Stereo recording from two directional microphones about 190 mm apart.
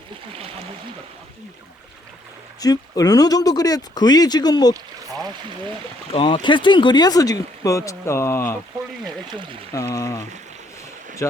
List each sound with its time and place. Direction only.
0.3 s a sound: 30° right (ahead or behind)
2.6 s speech: 20° left (ahead or behind)
6.1 s speech: 25° left (ahead or behind)
9.2 s speech: 25° right (ahead or behind)
9.7 s speech: 15° left (ahead or behind)